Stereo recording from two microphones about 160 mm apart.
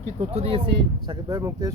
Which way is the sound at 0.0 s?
40° right (ahead or behind).